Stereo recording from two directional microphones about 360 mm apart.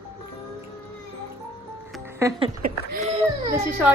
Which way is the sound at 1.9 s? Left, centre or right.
Centre.